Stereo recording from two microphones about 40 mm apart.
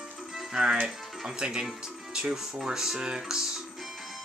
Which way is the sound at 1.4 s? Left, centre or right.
Centre.